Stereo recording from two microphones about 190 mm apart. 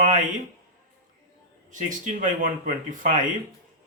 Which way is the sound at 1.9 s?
40° right (ahead or behind).